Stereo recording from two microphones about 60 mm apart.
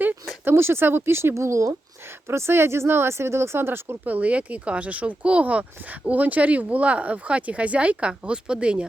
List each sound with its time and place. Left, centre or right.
0.0 s speech: right
4.0 s speech: right